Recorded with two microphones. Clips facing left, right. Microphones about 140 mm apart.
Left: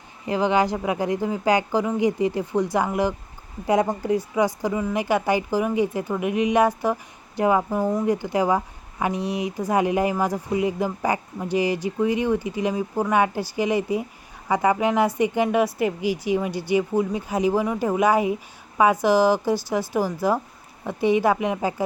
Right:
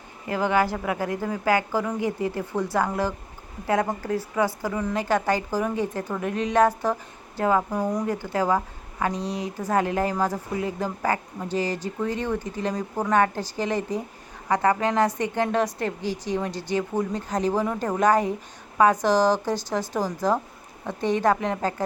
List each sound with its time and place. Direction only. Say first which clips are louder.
0.3 s a woman's voice: left 2 dB; 20° left (ahead or behind)